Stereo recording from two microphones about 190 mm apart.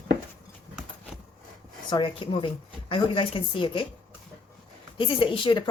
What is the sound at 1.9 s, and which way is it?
Speech, 25° left (ahead or behind).